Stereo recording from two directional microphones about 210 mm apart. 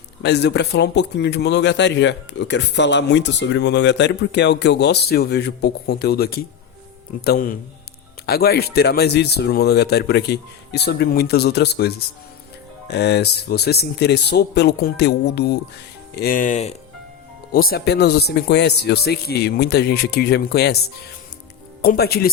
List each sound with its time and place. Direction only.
0.2 s a man's voice: 50° left (ahead or behind); by 16.7 s 35° left (ahead or behind)
17.5 s speech: 45° left (ahead or behind)
21.8 s speech: 50° left (ahead or behind)